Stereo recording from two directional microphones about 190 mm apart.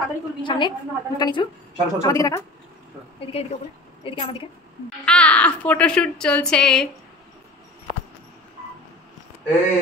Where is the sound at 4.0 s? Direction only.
30° left (ahead or behind).